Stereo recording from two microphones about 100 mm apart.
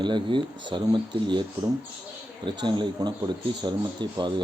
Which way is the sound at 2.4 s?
50° right (ahead or behind).